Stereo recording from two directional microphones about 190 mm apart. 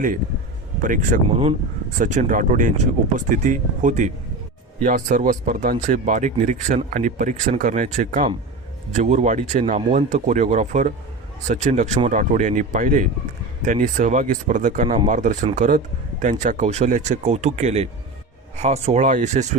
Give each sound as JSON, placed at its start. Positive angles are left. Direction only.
{"t": 0.8, "sound": "speech", "side_deg": -45}